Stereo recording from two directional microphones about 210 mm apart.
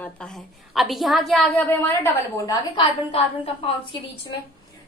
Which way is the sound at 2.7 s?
25° left (ahead or behind).